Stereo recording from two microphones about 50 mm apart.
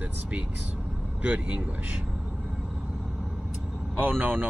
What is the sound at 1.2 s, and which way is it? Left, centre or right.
Speech, right.